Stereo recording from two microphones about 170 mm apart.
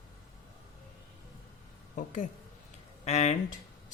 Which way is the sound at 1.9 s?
50° left (ahead or behind).